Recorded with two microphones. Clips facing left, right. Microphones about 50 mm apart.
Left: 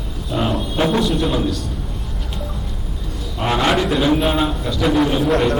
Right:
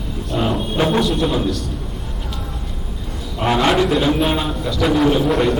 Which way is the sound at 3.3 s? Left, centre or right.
Centre.